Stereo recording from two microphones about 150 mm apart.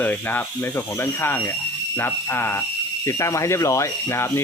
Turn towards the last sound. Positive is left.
turn(degrees=15)  # may be behind; listen again after turning